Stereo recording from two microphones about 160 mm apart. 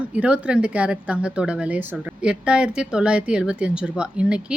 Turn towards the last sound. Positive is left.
turn(degrees=-5)  # may be behind; listen again after turning